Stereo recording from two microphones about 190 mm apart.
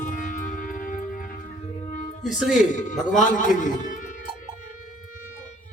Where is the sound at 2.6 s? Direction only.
40° left (ahead or behind).